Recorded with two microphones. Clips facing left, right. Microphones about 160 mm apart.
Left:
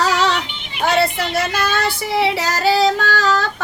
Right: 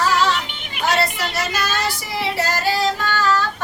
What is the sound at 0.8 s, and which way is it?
Child singing, 55° left (ahead or behind).